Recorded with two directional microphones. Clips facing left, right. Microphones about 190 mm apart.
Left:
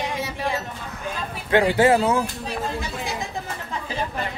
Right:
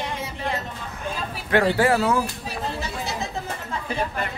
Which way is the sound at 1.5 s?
20° left (ahead or behind).